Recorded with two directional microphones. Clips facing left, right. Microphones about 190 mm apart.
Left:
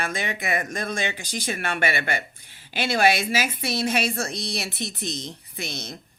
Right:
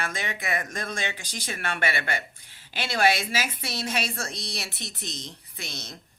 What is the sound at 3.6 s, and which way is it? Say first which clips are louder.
A woman's voice: left 6 dB; 55° left (ahead or behind).